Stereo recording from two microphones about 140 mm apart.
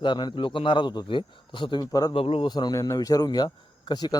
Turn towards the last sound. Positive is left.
turn(degrees=30)  # may be behind; listen again after turning